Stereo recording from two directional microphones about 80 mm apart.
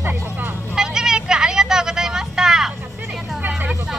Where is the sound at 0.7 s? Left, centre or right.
Centre.